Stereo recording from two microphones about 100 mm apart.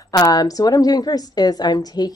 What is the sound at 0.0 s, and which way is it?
A woman's voice, 35° left (ahead or behind).